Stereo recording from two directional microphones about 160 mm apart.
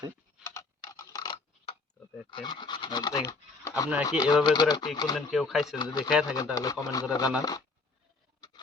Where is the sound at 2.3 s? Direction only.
30° left (ahead or behind).